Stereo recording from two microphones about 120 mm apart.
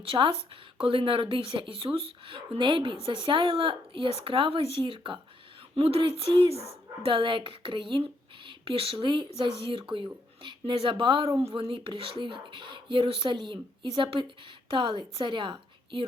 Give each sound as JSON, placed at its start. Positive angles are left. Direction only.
{"t": 0.0, "sound": "speech", "side_deg": -45}